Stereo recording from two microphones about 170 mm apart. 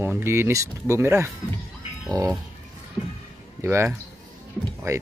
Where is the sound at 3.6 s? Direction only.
15° right (ahead or behind).